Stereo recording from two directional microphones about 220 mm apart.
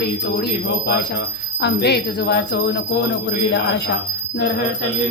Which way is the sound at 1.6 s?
50° left (ahead or behind).